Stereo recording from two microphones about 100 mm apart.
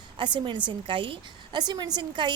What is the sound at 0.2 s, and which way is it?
Speech, 50° right (ahead or behind).